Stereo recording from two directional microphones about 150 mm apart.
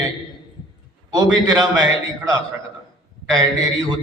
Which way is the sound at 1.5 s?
25° right (ahead or behind).